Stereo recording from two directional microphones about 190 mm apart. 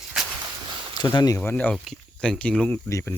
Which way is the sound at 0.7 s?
25° right (ahead or behind).